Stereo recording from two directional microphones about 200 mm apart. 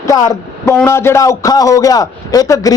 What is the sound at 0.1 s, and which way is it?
A man's voice, 15° left (ahead or behind).